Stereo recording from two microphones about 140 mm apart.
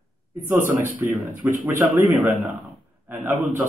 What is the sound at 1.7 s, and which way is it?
Speech, 75° right (ahead or behind).